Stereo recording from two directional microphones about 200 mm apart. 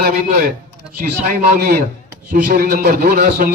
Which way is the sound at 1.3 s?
45° right (ahead or behind).